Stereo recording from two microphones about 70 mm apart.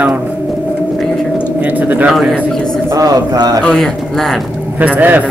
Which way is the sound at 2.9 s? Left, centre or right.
Right.